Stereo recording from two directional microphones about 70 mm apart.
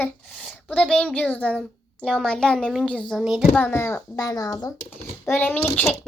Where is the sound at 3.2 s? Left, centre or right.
Centre.